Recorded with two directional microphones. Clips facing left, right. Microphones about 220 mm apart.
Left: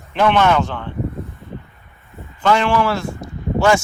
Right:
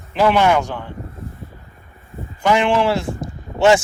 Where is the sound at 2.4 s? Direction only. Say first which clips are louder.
Even; 15° right (ahead or behind).